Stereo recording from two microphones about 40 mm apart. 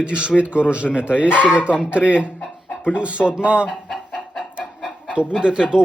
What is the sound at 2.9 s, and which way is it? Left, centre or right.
Speech, right.